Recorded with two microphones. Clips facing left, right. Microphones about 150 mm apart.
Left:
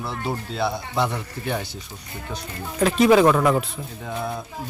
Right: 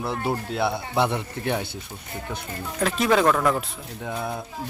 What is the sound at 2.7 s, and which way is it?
Speech, centre (ahead or behind).